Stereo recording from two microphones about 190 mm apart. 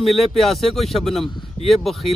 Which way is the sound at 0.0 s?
Centre (ahead or behind).